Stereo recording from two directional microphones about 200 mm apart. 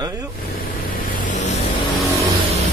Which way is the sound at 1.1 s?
40° left (ahead or behind).